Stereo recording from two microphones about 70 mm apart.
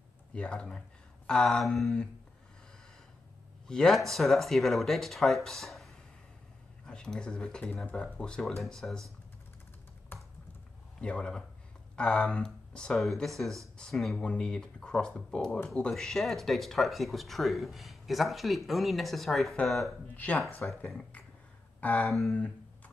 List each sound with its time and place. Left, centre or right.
0.3 s speech: centre
3.6 s speech: centre
11.0 s speech: centre
20.2 s speech: left
22.0 s speech: centre